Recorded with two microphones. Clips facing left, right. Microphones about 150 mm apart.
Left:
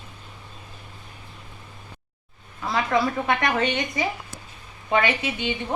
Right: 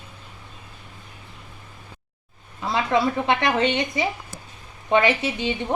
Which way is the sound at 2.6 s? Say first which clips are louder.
Right 1 dB; 25° right (ahead or behind).